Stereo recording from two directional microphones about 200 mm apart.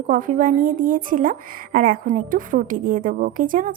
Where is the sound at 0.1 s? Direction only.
40° right (ahead or behind).